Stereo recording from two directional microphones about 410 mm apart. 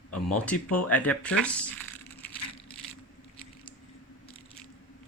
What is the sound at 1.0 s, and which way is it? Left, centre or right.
Speech, centre.